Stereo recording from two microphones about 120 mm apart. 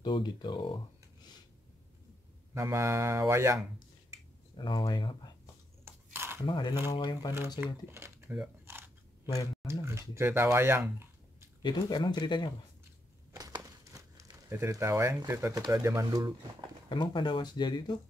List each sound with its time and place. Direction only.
0.0 s speech: 40° left (ahead or behind)
2.5 s speech: 25° right (ahead or behind)
4.6 s speech: 40° left (ahead or behind)
6.1 s a sound: 20° right (ahead or behind)
6.4 s speech: 40° left (ahead or behind)
7.6 s speech: 20° right (ahead or behind)
8.6 s a sound: 20° right (ahead or behind)
9.2 s speech: 30° left (ahead or behind)
9.7 s speech: 25° right (ahead or behind)
11.6 s speech: 40° left (ahead or behind)
13.4 s crumpling: 30° right (ahead or behind)
15.6 s speech: 25° right (ahead or behind)
16.9 s speech: 40° left (ahead or behind)